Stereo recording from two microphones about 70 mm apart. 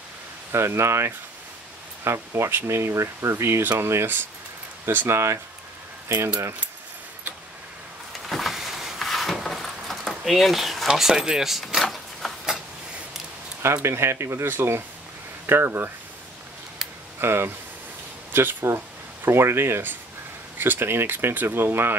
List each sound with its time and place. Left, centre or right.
0.5 s speech: right
8.3 s a sound: centre
13.8 s speech: right
17.2 s speech: right
18.3 s a sound: right
19.2 s speech: right